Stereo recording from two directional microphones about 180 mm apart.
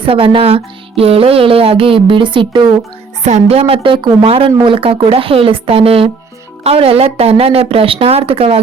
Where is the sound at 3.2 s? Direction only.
35° right (ahead or behind).